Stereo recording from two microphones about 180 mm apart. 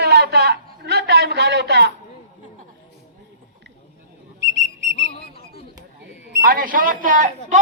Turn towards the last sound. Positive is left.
turn(degrees=-45)  # may be behind; listen again after turning